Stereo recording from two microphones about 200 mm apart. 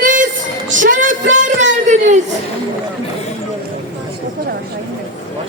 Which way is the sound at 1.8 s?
35° right (ahead or behind).